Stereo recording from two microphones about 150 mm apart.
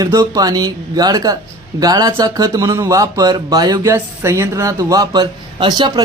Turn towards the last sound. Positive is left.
turn(degrees=-30)  # may be behind; listen again after turning